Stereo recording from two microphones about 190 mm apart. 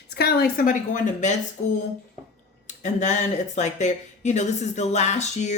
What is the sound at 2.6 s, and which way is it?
Speech, 40° left (ahead or behind).